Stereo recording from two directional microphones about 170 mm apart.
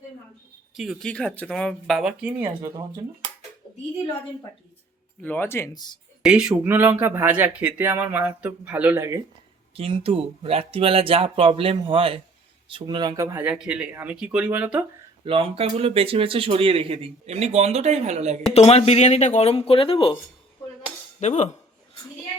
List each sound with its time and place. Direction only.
0.7 s speech: centre (ahead or behind)
2.6 s speech: 25° right (ahead or behind)
5.2 s speech: 10° left (ahead or behind)
6.2 s speech: 5° right (ahead or behind)
9.7 s speech: 35° right (ahead or behind)
13.3 s speech: 10° right (ahead or behind)
15.2 s speech: 35° right (ahead or behind)
18.5 s speech: 35° left (ahead or behind)
21.2 s cutlery: 45° left (ahead or behind)